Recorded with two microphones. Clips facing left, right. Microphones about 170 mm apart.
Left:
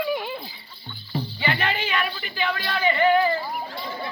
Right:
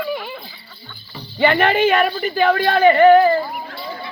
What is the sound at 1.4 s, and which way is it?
Speech, 55° right (ahead or behind).